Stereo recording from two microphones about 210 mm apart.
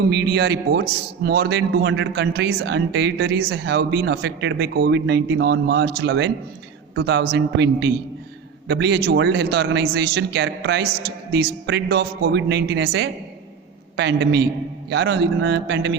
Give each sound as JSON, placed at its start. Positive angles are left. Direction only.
{"t": 0.1, "sound": "a man's voice", "side_deg": -50}